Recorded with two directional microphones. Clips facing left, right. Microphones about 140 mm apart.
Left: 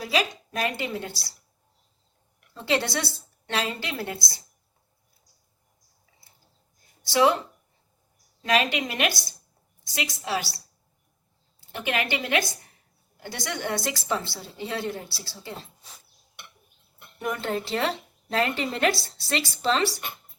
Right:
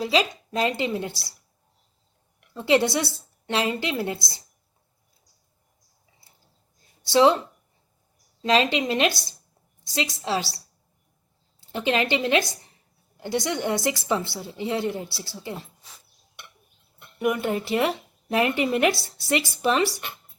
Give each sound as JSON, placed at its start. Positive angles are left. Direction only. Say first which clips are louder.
{"t": 0.0, "sound": "a woman's voice", "louder": "right 4 dB", "side_deg": -25}
{"t": 2.6, "sound": "a woman's voice", "louder": "right 5 dB", "side_deg": -20}
{"t": 7.1, "sound": "a woman's voice", "louder": "right 3 dB", "side_deg": -25}
{"t": 8.4, "sound": "a woman's voice", "louder": "right 3 dB", "side_deg": -25}
{"t": 11.7, "sound": "a woman's voice", "louder": "right 5 dB", "side_deg": -25}
{"t": 17.2, "sound": "a woman's voice", "louder": "right 4 dB", "side_deg": -15}